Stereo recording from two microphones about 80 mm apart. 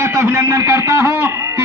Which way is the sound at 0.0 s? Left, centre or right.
Right.